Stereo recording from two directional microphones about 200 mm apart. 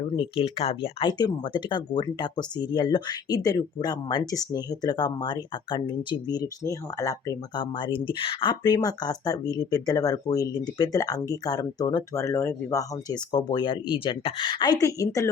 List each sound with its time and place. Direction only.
0.2 s speech: 30° left (ahead or behind)